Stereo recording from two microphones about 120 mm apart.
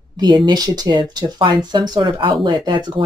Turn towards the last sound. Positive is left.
turn(degrees=-40)  # may be behind; listen again after turning